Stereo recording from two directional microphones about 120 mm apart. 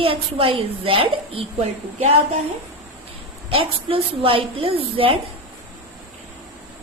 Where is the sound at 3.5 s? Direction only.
50° right (ahead or behind).